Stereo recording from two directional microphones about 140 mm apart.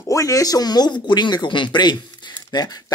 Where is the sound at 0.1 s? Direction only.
25° left (ahead or behind).